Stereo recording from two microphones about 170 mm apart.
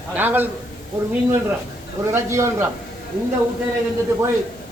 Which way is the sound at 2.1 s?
15° right (ahead or behind).